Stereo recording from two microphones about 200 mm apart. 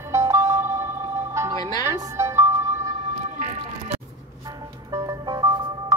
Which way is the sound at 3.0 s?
35° right (ahead or behind).